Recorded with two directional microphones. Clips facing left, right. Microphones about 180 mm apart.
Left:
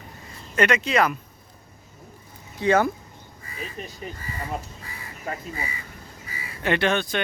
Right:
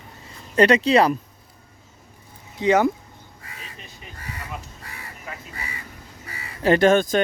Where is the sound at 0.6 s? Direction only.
35° right (ahead or behind).